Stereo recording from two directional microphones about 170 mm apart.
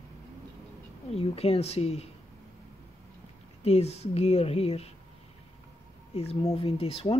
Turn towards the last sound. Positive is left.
turn(degrees=35)  # may be behind; listen again after turning